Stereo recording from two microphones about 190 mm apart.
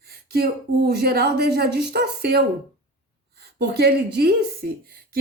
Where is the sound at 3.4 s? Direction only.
55° right (ahead or behind).